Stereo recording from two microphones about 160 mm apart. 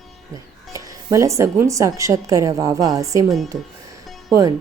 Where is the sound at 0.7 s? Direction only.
20° right (ahead or behind).